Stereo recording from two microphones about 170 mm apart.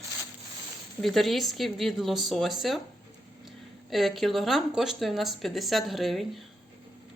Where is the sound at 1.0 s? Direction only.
Centre (ahead or behind).